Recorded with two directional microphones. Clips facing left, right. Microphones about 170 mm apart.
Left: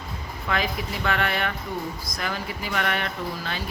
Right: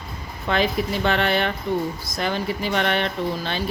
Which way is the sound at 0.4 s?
30° right (ahead or behind).